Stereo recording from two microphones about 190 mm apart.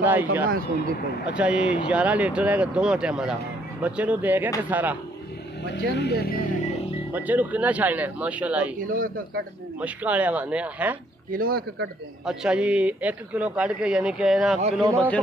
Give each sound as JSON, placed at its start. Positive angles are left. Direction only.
{"t": 0.0, "sound": "speech", "side_deg": -10}
{"t": 0.5, "sound": "a man's voice", "side_deg": -50}
{"t": 1.2, "sound": "speech", "side_deg": -5}
{"t": 5.9, "sound": "speech", "side_deg": 60}
{"t": 7.1, "sound": "speech", "side_deg": -10}
{"t": 8.7, "sound": "a man's voice", "side_deg": -45}
{"t": 9.8, "sound": "speech", "side_deg": -5}
{"t": 11.2, "sound": "a man's voice", "side_deg": -50}
{"t": 12.3, "sound": "a man's voice", "side_deg": -5}
{"t": 14.6, "sound": "a man's voice", "side_deg": -35}